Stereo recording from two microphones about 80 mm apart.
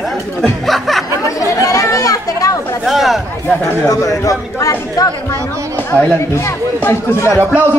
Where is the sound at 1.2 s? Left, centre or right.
Left.